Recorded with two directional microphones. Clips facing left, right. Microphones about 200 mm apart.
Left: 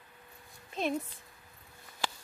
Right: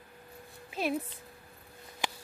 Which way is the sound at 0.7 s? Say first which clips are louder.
Right 1 dB; 5° right (ahead or behind).